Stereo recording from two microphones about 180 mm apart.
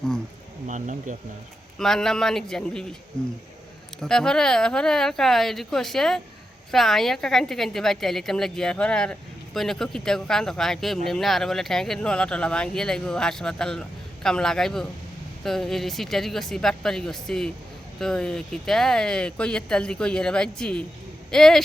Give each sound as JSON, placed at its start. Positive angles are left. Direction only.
{"t": 0.7, "sound": "speech", "side_deg": -45}
{"t": 1.8, "sound": "a woman's voice", "side_deg": 5}
{"t": 4.0, "sound": "a woman's voice", "side_deg": 5}